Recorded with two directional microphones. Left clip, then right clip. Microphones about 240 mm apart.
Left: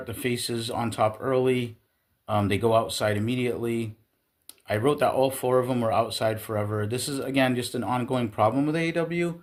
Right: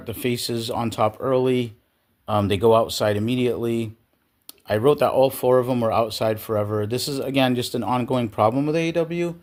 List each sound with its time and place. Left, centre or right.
0.0 s speech: right